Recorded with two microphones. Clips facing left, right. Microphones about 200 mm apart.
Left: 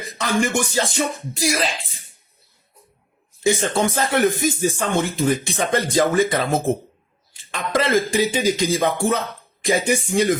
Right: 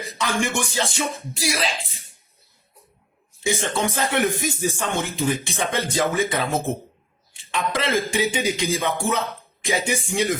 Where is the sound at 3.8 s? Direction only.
30° left (ahead or behind).